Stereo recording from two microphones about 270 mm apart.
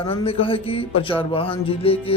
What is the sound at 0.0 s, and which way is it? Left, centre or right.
Speech, left.